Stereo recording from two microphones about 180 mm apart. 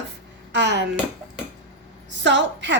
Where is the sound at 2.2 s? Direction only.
80° right.